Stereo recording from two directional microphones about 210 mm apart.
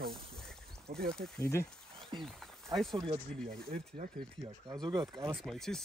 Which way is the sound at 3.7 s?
35° right (ahead or behind).